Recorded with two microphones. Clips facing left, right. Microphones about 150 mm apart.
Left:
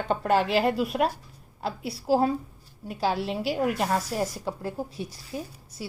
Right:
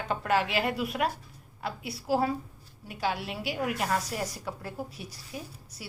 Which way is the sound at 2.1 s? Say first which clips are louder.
Left 4 dB; 30° left (ahead or behind).